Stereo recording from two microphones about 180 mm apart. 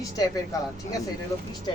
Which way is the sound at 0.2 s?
20° left (ahead or behind).